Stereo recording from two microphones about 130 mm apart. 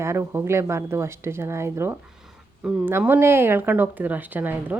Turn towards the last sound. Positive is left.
turn(degrees=-15)  # may be behind; listen again after turning